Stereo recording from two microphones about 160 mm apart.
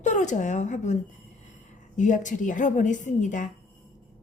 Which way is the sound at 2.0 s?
50° left (ahead or behind).